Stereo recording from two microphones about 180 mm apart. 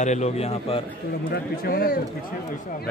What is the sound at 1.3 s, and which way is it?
Speech, 60° left (ahead or behind).